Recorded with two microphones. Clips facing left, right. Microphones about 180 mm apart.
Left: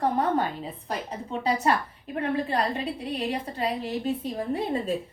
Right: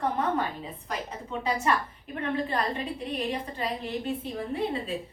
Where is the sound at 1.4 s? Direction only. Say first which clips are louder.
Left 3 dB; 35° left (ahead or behind).